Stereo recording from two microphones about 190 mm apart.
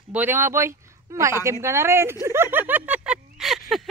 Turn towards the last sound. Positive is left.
turn(degrees=0)  # may be behind; listen again after turning